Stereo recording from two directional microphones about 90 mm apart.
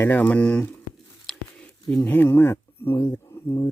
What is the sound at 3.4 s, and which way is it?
Speech, 40° left (ahead or behind).